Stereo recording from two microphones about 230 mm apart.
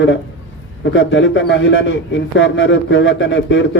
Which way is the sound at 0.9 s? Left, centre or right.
Left.